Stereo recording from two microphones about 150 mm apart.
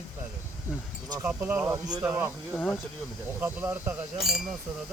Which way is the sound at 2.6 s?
10° left (ahead or behind).